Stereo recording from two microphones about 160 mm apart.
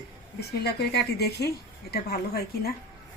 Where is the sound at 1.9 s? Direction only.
75° left (ahead or behind).